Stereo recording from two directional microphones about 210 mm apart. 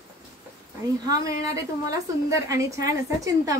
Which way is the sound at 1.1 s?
15° right (ahead or behind).